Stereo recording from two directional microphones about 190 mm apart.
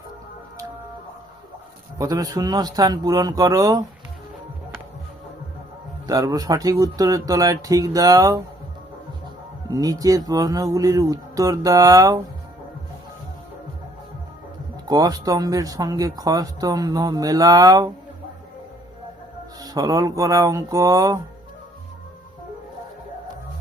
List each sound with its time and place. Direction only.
2.0 s speech: 20° right (ahead or behind)
6.1 s speech: 20° right (ahead or behind)
9.6 s speech: 20° right (ahead or behind)
14.8 s speech: 20° right (ahead or behind)
19.6 s speech: 20° right (ahead or behind)